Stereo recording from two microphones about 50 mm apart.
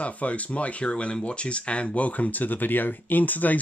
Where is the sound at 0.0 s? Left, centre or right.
Left.